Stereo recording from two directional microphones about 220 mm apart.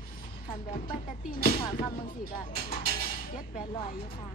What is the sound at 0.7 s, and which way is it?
Speech, 40° left (ahead or behind).